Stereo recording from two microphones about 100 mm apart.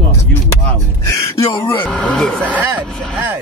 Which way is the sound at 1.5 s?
60° left (ahead or behind).